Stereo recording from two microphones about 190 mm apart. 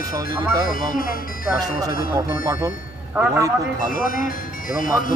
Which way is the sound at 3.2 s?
10° right (ahead or behind).